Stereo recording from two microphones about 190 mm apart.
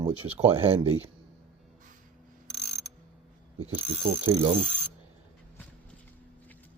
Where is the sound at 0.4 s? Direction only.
30° right (ahead or behind).